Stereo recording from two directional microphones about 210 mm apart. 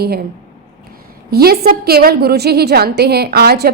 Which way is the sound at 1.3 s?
45° right (ahead or behind).